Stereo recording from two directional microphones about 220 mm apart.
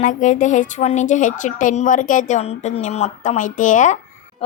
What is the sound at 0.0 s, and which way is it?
A woman's voice, 35° left (ahead or behind).